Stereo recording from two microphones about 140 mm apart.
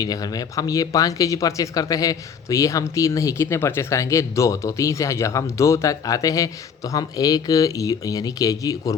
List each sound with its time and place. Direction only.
0.0 s speech: 25° left (ahead or behind)